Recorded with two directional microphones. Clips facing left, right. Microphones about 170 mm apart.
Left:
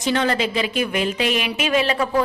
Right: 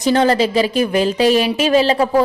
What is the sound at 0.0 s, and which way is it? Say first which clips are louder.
A woman's voice: right 6 dB; 35° right (ahead or behind).